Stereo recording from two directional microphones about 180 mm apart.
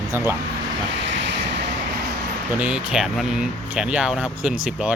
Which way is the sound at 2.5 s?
5° right (ahead or behind).